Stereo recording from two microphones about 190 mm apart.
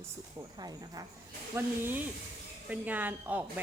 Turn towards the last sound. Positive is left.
turn(degrees=-10)  # may be behind; listen again after turning